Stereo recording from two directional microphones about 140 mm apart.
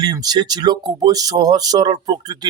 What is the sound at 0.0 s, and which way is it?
Speech, 30° right (ahead or behind).